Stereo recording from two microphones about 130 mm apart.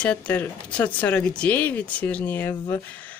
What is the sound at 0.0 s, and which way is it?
Speech, 10° left (ahead or behind).